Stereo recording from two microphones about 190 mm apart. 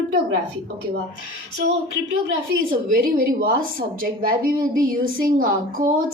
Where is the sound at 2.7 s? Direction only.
50° right (ahead or behind).